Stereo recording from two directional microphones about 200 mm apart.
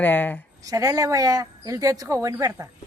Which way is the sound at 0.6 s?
15° right (ahead or behind).